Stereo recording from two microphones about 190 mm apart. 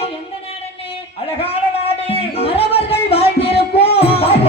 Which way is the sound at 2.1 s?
30° left (ahead or behind).